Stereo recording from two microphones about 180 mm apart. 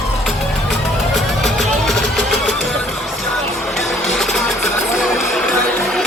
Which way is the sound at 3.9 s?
Centre (ahead or behind).